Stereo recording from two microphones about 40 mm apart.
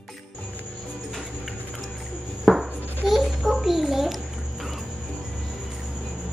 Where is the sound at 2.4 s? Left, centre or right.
Centre.